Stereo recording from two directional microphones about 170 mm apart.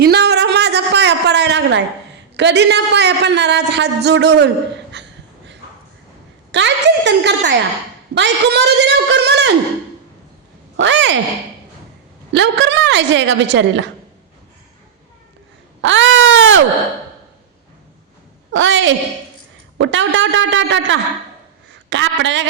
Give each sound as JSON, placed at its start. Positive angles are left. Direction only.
{"t": 0.0, "sound": "a sound", "side_deg": -75}
{"t": 2.3, "sound": "a man's voice", "side_deg": -85}
{"t": 6.5, "sound": "a woman's voice", "side_deg": -90}
{"t": 10.8, "sound": "a woman's voice", "side_deg": -90}
{"t": 12.3, "sound": "a woman's voice", "side_deg": -90}
{"t": 15.8, "sound": "a sound", "side_deg": -90}
{"t": 18.5, "sound": "a woman's voice", "side_deg": -90}